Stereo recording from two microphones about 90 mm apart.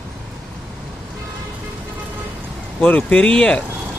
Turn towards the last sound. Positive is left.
turn(degrees=10)  # may be behind; listen again after turning